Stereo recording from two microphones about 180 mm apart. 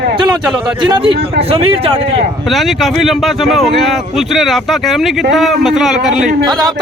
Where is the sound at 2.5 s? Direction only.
Centre (ahead or behind).